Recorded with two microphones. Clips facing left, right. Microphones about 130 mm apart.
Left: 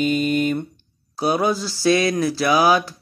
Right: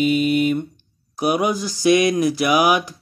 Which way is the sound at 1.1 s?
15° right (ahead or behind).